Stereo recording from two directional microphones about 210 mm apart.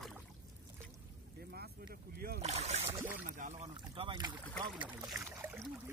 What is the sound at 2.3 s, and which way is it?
Boat, 30° right (ahead or behind).